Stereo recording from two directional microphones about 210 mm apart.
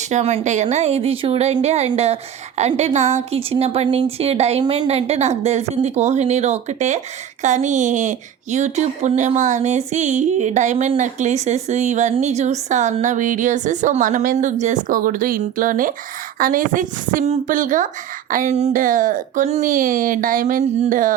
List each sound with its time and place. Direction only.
0.1 s speech: 30° right (ahead or behind)